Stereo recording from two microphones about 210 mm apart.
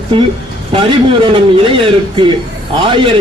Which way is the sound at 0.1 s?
25° right (ahead or behind).